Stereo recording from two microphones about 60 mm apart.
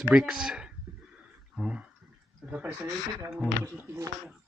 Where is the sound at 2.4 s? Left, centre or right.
Right.